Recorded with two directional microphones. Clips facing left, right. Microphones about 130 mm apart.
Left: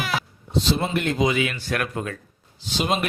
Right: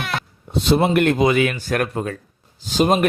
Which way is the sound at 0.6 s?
65° right (ahead or behind).